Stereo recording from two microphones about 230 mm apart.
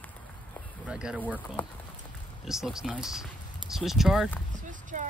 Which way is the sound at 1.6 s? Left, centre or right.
Centre.